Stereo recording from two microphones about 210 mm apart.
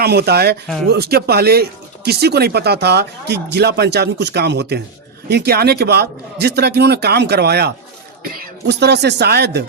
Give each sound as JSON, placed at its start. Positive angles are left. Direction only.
{"t": 0.0, "sound": "speech", "side_deg": -50}